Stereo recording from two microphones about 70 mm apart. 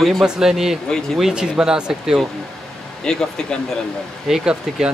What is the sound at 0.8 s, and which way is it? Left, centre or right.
Speech, centre.